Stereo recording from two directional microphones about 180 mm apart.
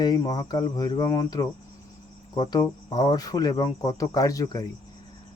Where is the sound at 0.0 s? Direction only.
20° left (ahead or behind).